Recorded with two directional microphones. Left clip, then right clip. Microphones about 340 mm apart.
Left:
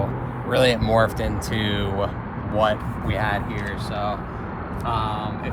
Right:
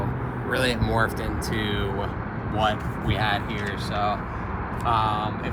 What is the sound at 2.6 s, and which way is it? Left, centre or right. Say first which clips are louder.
Speech: left 4 dB; centre.